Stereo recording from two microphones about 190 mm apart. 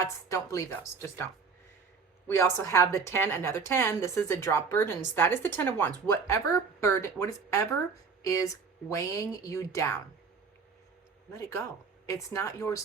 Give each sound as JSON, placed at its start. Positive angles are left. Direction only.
{"t": 0.0, "sound": "a woman's voice", "side_deg": 15}
{"t": 11.3, "sound": "a woman's voice", "side_deg": 15}